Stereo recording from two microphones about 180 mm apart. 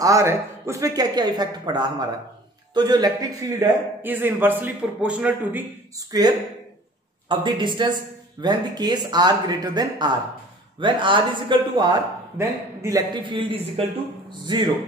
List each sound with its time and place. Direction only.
0.0 s a man's voice: 15° right (ahead or behind)
6.1 s speech: 20° right (ahead or behind)